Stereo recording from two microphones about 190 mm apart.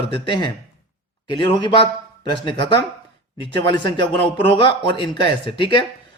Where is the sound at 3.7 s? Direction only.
25° left (ahead or behind).